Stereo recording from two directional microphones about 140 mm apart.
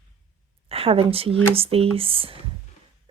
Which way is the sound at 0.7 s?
45° right (ahead or behind).